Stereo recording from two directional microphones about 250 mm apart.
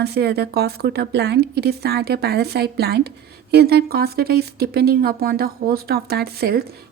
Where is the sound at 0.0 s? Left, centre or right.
Right.